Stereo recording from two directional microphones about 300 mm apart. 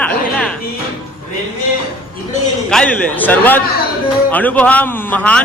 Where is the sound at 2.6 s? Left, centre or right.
Centre.